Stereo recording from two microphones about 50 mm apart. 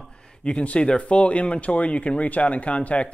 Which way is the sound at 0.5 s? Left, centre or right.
Left.